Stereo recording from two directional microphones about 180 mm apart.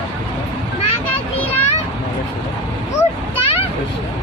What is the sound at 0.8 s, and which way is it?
Children playing, 35° left (ahead or behind).